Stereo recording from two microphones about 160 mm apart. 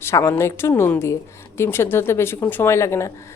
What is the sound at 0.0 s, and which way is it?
A woman's voice, 15° left (ahead or behind).